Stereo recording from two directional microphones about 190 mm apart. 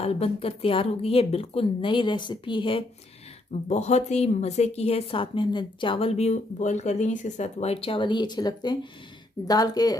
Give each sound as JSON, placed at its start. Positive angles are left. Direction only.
{"t": 0.0, "sound": "a woman's voice", "side_deg": 30}